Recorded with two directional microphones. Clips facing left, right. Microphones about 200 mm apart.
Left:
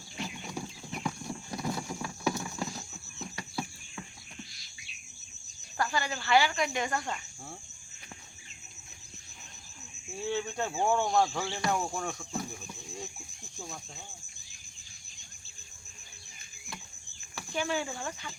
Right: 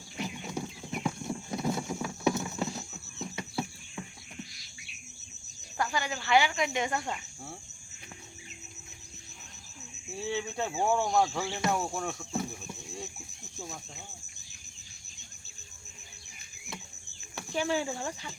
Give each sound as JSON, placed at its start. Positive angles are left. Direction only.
{"t": 0.2, "sound": "clip-clop", "side_deg": -20}
{"t": 5.8, "sound": "cricket", "side_deg": -15}
{"t": 6.2, "sound": "speech", "side_deg": -15}
{"t": 10.2, "sound": "speech", "side_deg": 0}
{"t": 17.3, "sound": "speech", "side_deg": -30}